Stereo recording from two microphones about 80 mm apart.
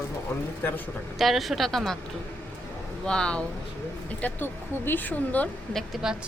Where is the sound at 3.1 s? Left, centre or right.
Centre.